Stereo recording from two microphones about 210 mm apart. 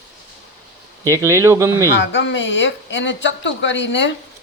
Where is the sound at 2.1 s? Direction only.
60° left (ahead or behind).